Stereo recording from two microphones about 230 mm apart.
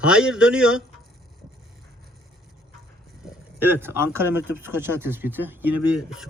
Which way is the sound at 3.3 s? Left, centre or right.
Centre.